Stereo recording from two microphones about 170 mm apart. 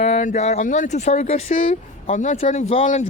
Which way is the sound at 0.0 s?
45° left (ahead or behind).